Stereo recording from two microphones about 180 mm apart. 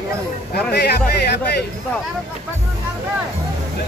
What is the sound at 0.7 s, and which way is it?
Speech, 60° left (ahead or behind).